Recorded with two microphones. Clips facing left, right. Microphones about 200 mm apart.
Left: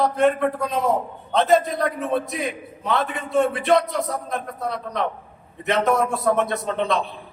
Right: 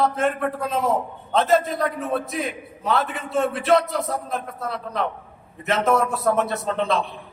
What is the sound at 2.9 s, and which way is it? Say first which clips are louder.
A man's voice: even; centre (ahead or behind).